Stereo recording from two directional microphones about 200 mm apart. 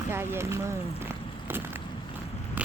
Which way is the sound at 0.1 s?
10° right (ahead or behind).